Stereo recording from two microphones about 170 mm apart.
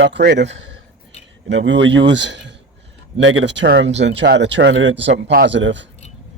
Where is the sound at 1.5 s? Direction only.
90° right.